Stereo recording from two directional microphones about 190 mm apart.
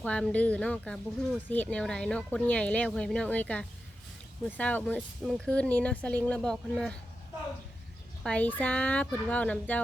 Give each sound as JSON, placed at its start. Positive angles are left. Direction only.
{"t": 0.0, "sound": "speech", "side_deg": 5}
{"t": 8.2, "sound": "speech", "side_deg": 5}